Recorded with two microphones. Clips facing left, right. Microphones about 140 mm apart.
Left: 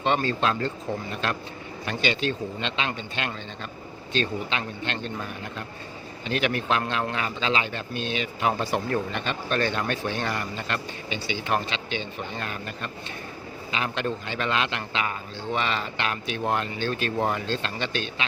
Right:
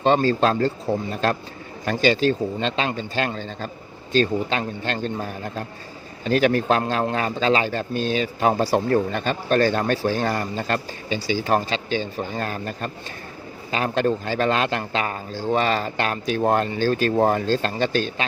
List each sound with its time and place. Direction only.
0.0 s a man's voice: 35° right (ahead or behind)